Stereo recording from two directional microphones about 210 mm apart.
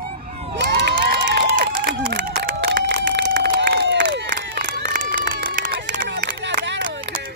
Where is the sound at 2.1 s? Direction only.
45° right (ahead or behind).